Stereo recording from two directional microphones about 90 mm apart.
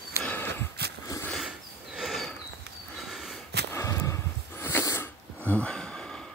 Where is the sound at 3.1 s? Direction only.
5° right (ahead or behind).